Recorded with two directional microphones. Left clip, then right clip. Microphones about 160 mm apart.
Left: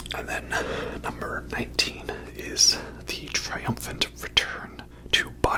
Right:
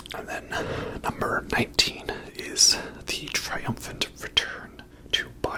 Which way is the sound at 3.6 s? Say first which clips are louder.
Left 2 dB; 5° left (ahead or behind).